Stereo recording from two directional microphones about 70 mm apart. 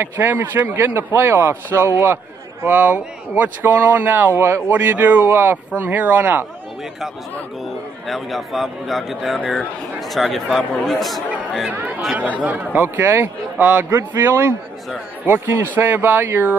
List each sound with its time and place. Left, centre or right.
0.0 s a man's voice: right
2.6 s speech: right
7.6 s a man's voice: centre
11.7 s a man's voice: right
13.6 s speech: right
13.8 s a man's voice: right